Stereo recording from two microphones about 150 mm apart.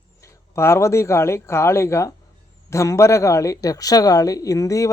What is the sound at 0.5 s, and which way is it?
A man's voice, 20° left (ahead or behind).